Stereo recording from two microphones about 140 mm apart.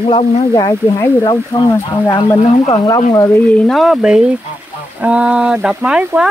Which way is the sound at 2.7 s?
30° left (ahead or behind).